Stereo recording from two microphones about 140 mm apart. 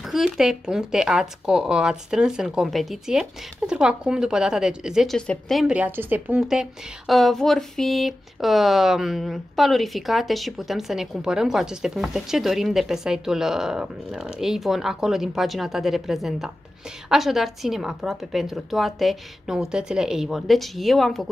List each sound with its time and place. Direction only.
0.0 s speech: centre (ahead or behind)